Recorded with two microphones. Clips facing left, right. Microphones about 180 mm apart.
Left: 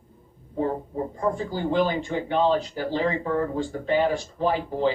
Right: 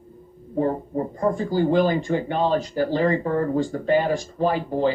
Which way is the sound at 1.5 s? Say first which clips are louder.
Right 6 dB; 40° right (ahead or behind).